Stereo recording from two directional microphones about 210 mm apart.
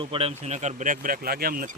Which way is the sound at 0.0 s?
25° right (ahead or behind).